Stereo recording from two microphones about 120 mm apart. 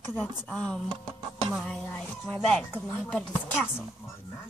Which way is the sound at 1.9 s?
10° left (ahead or behind).